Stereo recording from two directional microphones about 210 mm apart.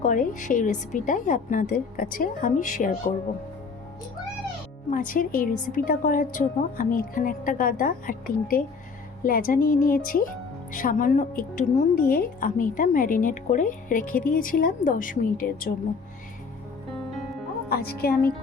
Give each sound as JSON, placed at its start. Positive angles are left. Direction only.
{"t": 0.0, "sound": "a woman's voice", "side_deg": 40}
{"t": 4.9, "sound": "a woman's voice", "side_deg": 40}
{"t": 17.7, "sound": "a woman's voice", "side_deg": 45}